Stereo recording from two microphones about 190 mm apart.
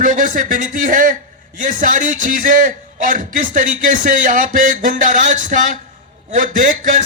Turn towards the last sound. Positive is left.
turn(degrees=-45)  # may be behind; listen again after turning